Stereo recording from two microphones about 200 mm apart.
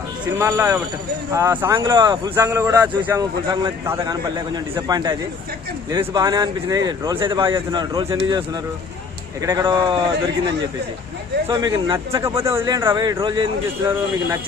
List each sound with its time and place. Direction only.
0.3 s a man's voice: 10° right (ahead or behind)
11.4 s a man's voice: 20° right (ahead or behind)